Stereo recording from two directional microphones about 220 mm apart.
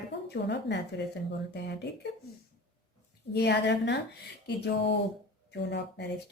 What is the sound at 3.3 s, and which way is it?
Speech, 50° left (ahead or behind).